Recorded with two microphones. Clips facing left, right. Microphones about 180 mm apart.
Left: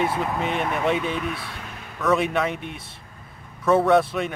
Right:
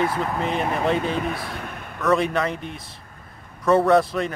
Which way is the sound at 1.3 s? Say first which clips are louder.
Right 4 dB; 55° right (ahead or behind).